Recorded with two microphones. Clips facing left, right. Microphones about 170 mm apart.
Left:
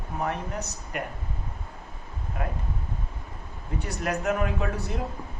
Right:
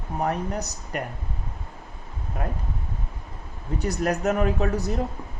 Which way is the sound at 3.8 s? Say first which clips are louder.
Right 5 dB; 40° right (ahead or behind).